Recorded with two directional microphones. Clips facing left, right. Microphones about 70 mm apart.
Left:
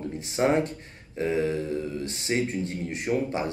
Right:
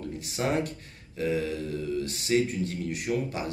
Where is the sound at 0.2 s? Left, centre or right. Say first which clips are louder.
Left 5 dB; left.